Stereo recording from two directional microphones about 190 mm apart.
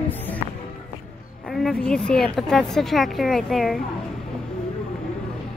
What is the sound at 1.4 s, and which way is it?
A woman's voice, centre (ahead or behind).